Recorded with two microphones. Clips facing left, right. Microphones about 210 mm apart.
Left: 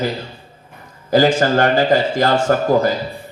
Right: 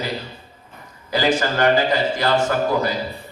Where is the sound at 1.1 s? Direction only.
50° left (ahead or behind).